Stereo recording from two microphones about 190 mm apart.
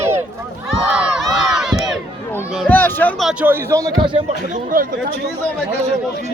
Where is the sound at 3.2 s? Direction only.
5° right (ahead or behind); by 4.2 s 25° right (ahead or behind).